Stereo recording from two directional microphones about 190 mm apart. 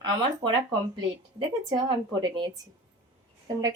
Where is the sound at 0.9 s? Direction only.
25° right (ahead or behind).